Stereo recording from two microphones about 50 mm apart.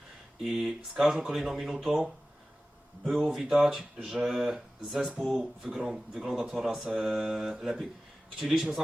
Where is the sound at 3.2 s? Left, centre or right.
Centre.